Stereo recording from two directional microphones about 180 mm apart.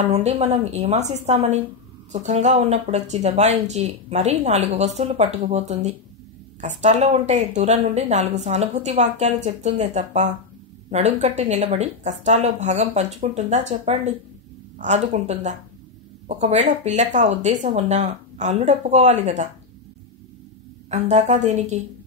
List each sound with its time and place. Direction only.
0.0 s speech: 35° right (ahead or behind)
20.9 s speech: 40° right (ahead or behind)